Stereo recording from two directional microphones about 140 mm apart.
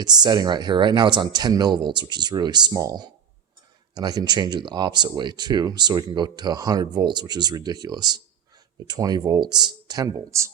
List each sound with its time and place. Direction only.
0.0 s speech: 30° right (ahead or behind)